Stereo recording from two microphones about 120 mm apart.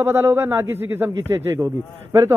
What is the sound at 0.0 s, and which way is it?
Speech, 20° right (ahead or behind).